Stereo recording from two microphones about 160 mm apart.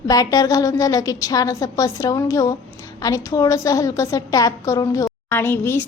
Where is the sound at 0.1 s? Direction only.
20° left (ahead or behind).